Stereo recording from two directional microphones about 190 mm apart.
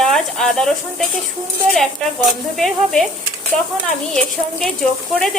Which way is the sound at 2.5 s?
Centre (ahead or behind).